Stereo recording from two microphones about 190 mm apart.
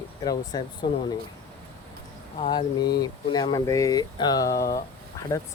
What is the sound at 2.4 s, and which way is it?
Speech, 25° left (ahead or behind).